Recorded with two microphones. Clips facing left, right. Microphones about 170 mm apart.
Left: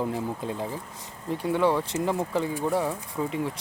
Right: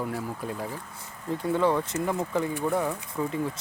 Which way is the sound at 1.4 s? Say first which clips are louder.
Left 1 dB; 15° left (ahead or behind).